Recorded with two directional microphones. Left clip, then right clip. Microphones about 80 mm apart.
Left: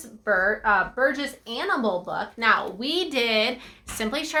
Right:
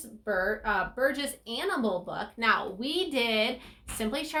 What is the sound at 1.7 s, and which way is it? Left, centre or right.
A woman's voice, left.